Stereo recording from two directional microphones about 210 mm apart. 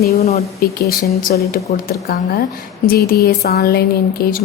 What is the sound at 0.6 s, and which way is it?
A woman's voice, 50° left (ahead or behind).